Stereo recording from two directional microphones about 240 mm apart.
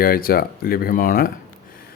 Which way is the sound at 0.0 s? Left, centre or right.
Left.